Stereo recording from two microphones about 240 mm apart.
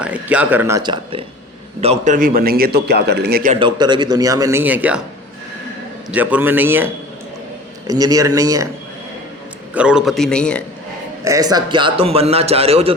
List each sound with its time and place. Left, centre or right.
0.0 s a man's voice: centre
1.8 s a man's voice: right
3.5 s a man's voice: centre
6.1 s a man's voice: centre
7.9 s a man's voice: centre
9.7 s a man's voice: centre
11.2 s a man's voice: centre